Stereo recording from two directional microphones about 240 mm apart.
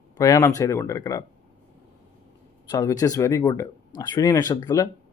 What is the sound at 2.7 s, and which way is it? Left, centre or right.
Speech, centre.